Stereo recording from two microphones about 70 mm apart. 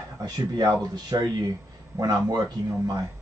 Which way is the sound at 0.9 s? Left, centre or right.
Right.